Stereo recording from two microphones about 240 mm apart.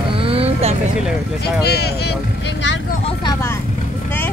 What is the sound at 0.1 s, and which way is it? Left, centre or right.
Vehicle, right.